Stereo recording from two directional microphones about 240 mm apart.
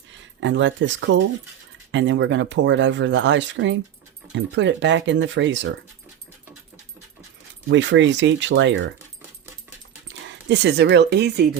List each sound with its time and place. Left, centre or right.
0.3 s speech: right
7.7 s speech: right
10.5 s speech: right